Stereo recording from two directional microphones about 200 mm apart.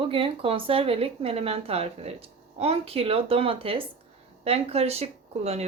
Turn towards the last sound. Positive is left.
turn(degrees=-30)  # may be behind; listen again after turning